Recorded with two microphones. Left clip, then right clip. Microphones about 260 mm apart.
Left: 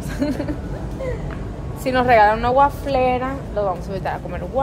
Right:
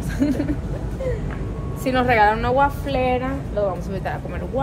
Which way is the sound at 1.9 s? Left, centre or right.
Centre.